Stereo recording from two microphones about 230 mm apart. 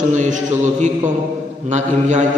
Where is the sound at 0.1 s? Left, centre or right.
Right.